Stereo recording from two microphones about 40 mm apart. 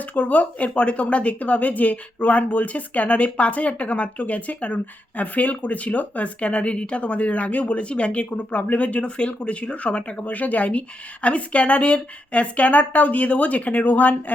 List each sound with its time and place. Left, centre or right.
0.0 s speech: left